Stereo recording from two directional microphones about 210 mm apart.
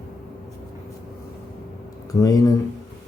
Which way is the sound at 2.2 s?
15° left (ahead or behind).